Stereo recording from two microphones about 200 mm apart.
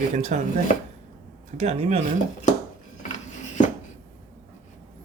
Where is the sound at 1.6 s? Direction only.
35° right (ahead or behind).